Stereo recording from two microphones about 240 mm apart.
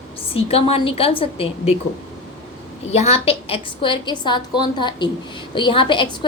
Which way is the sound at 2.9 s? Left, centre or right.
Left.